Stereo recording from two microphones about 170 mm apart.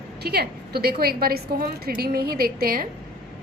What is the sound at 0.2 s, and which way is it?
A woman's voice, 70° right (ahead or behind).